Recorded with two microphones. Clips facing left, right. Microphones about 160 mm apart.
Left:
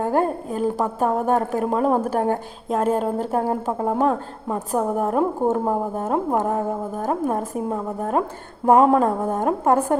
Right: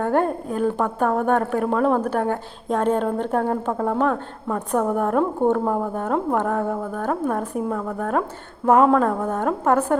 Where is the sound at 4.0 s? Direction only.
25° left (ahead or behind).